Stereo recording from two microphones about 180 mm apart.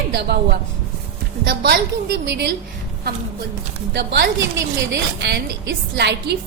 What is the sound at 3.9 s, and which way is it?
Speech, 70° right (ahead or behind).